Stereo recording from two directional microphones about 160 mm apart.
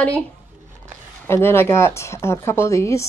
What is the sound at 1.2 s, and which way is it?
Speech, 15° left (ahead or behind).